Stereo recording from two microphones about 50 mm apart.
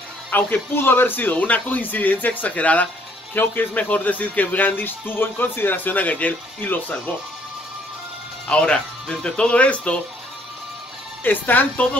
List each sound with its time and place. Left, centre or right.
0.3 s speech: left
1.3 s speech: left
8.5 s speech: left
11.2 s speech: left